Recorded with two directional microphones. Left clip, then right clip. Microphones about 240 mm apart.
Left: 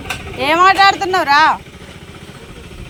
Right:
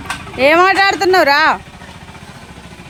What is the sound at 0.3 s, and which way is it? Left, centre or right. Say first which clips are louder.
Speech: right 1 dB; centre.